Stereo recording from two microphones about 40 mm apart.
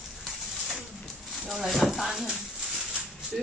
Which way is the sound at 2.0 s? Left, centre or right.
Centre.